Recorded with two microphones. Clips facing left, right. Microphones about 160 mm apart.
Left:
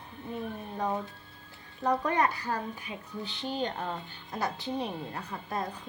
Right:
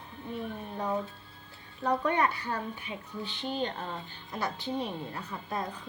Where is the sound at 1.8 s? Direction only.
35° left (ahead or behind).